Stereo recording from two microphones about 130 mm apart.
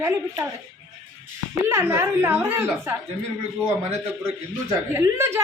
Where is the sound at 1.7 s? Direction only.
20° right (ahead or behind).